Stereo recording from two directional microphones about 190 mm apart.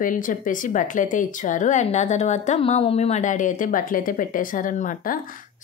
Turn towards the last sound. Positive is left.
turn(degrees=45)  # may be behind; listen again after turning